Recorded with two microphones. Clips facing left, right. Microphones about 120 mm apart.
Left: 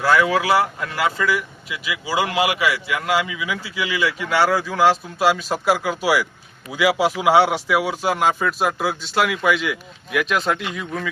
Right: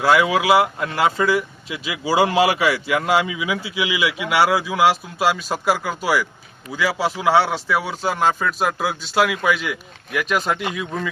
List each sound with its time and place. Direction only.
0.0 s speech: 15° right (ahead or behind)